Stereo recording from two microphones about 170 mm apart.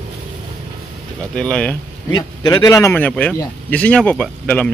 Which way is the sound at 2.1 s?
25° left (ahead or behind).